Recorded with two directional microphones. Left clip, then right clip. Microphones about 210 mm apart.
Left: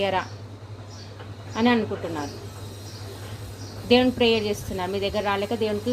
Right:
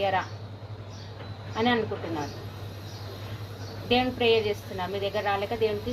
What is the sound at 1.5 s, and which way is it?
Speech, 60° left (ahead or behind).